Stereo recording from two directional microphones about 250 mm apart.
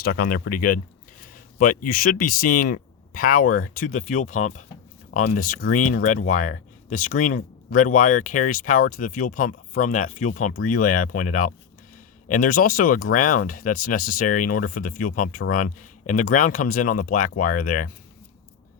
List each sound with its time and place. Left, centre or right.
0.3 s speech: left